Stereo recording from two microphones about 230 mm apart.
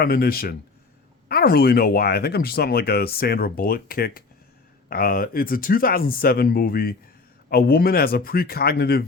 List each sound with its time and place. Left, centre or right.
0.0 s speech: left